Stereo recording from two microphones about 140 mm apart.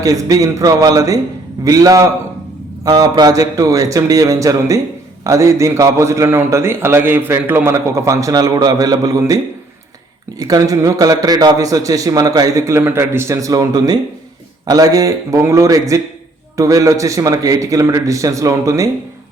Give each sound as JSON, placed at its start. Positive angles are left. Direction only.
{"t": 0.0, "sound": "a man's voice", "side_deg": -25}
{"t": 10.4, "sound": "a man's voice", "side_deg": -25}